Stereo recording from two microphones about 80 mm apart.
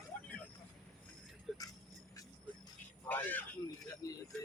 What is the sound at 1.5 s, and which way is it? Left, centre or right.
Jingle bell, centre.